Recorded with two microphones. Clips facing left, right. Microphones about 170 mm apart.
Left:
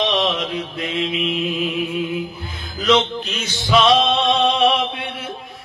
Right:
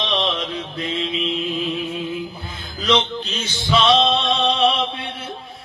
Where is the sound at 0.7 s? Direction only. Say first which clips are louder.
Left 1 dB; 30° right (ahead or behind).